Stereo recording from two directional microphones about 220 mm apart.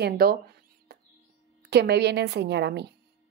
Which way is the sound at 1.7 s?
50° right (ahead or behind).